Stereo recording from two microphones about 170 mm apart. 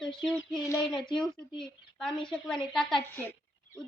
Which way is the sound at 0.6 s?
15° left (ahead or behind).